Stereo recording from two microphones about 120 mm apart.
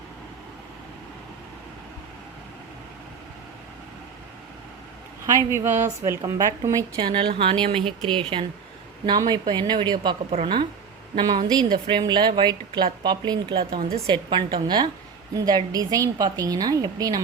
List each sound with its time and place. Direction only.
5.5 s a woman's voice: 20° right (ahead or behind)
6.9 s a woman's voice: 45° right (ahead or behind)